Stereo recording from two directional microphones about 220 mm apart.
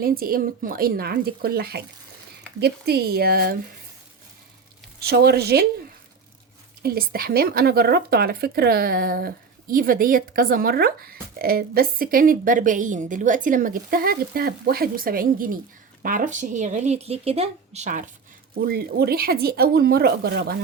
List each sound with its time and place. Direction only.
0.0 s speech: 40° right (ahead or behind)
4.9 s speech: 45° right (ahead or behind)
6.8 s speech: 45° right (ahead or behind)